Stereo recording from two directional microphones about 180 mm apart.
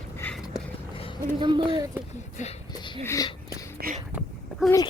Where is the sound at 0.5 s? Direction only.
30° left (ahead or behind).